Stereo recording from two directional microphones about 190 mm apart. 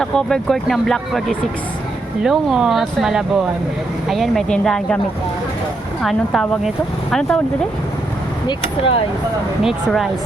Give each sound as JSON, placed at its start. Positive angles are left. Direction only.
{"t": 0.0, "sound": "speech", "side_deg": 5}
{"t": 6.0, "sound": "speech", "side_deg": 0}
{"t": 8.4, "sound": "speech", "side_deg": 30}
{"t": 9.6, "sound": "speech", "side_deg": 0}